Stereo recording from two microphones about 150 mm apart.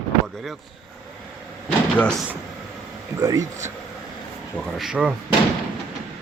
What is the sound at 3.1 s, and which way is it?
Speech, 20° right (ahead or behind).